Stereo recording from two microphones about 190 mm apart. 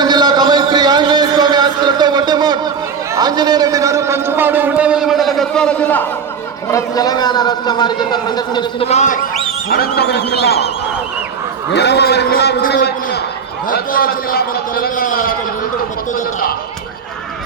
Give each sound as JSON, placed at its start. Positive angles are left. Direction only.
{"t": 0.0, "sound": "a sound", "side_deg": -20}
{"t": 6.7, "sound": "a man's voice", "side_deg": 15}
{"t": 8.9, "sound": "speech", "side_deg": 40}
{"t": 9.6, "sound": "a man's voice", "side_deg": 55}
{"t": 11.7, "sound": "a man's voice", "side_deg": 65}